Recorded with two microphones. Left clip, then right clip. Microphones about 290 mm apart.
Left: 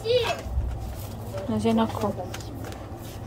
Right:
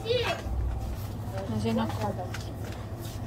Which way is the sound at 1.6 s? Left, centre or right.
Centre.